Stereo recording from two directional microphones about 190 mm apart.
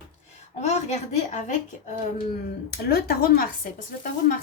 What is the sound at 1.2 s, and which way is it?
Speech, 40° left (ahead or behind).